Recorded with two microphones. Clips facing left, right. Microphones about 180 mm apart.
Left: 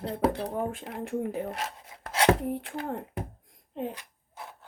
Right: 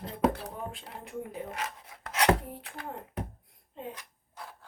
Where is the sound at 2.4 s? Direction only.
60° left (ahead or behind).